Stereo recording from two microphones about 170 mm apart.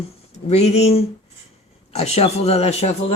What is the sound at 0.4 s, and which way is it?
Speech, 40° left (ahead or behind).